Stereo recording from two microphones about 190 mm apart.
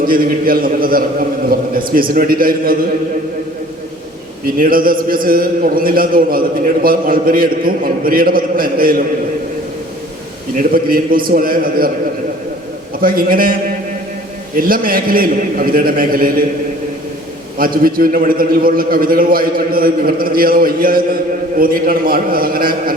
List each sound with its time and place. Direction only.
0.0 s a man's voice: 50° right (ahead or behind)
4.4 s a man's voice: 50° right (ahead or behind)
10.6 s a man's voice: 50° right (ahead or behind)
13.0 s a man's voice: 50° right (ahead or behind)
17.6 s a man's voice: 50° right (ahead or behind)